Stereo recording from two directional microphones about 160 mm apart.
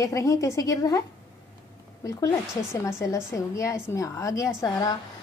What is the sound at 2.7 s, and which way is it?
A woman's voice, 20° left (ahead or behind).